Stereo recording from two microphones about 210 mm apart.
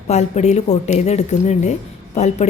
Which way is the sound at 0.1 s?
30° left (ahead or behind).